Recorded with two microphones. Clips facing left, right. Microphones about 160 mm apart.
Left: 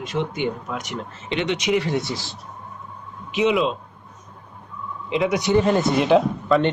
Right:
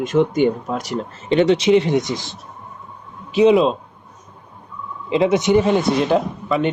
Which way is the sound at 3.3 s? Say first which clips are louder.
Right 7 dB; 35° right (ahead or behind).